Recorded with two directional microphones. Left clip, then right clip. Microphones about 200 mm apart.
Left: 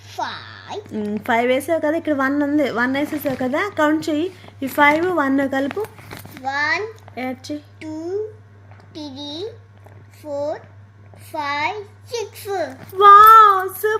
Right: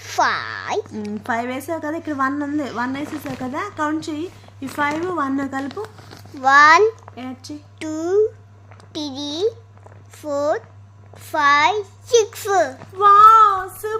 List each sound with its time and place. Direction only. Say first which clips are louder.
0.0 s a sound: right 8 dB; 60° right (ahead or behind)
0.9 s a woman's voice: left 4 dB; 20° left (ahead or behind)
6.4 s a child's voice: right 10 dB; 60° right (ahead or behind)
7.2 s speech: left 6 dB; 20° left (ahead or behind)
7.8 s a child's voice: right 9 dB; 60° right (ahead or behind)
13.0 s speech: left 3 dB; 20° left (ahead or behind)